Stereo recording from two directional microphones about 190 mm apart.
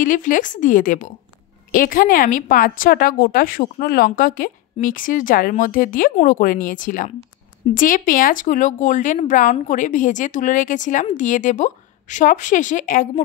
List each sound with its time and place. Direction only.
0.0 s a woman's voice: 45° left (ahead or behind)